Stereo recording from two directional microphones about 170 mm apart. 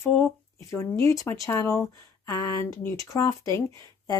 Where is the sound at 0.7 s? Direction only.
20° left (ahead or behind).